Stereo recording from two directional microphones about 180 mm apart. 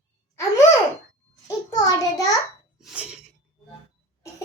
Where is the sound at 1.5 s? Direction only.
20° left (ahead or behind).